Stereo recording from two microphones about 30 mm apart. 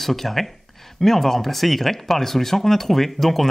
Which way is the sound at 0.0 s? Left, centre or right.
Centre.